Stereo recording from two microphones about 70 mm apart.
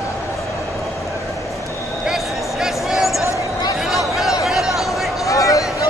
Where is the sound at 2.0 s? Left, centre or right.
Centre.